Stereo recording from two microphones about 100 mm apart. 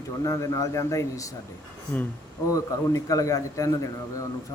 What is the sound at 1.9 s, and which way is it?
Speech, 20° left (ahead or behind).